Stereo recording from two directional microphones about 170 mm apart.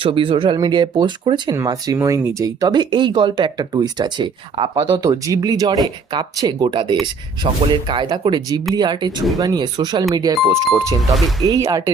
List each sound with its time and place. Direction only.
0.0 s speech: 30° right (ahead or behind)
4.8 s speech: 20° right (ahead or behind)
11.4 s speech: 20° right (ahead or behind)